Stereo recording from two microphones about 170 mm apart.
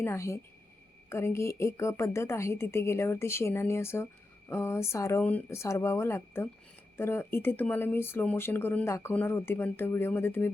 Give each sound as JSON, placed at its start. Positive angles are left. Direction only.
{"t": 0.0, "sound": "a woman's voice", "side_deg": 15}